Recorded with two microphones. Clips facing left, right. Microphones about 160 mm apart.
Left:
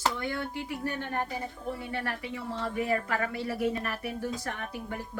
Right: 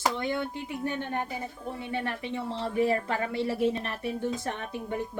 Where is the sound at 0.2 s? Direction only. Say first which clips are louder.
Right 3 dB; 20° right (ahead or behind).